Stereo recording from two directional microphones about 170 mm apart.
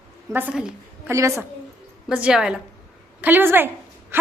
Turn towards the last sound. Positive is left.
turn(degrees=-10)  # may be behind; listen again after turning